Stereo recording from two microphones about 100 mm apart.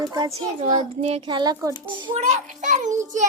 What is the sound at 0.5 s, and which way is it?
Speech, 90° right.